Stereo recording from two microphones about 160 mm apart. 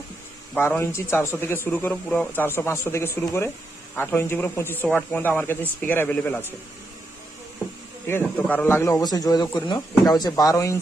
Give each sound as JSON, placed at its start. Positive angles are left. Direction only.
{"t": 0.5, "sound": "speech", "side_deg": 10}
{"t": 8.4, "sound": "a man's voice", "side_deg": 10}